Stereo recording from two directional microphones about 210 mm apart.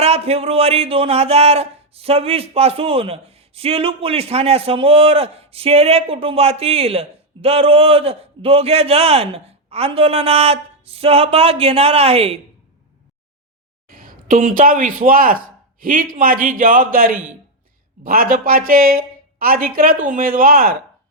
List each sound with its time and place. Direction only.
0.0 s speech: 30° right (ahead or behind)
13.8 s speech: 40° right (ahead or behind)